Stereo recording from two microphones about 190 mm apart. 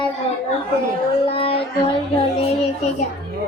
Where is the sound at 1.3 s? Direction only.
30° left (ahead or behind).